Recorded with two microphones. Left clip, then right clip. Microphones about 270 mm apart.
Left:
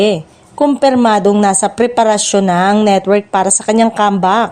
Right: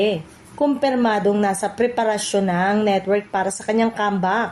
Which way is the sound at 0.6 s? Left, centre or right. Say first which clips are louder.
Left 8 dB; left.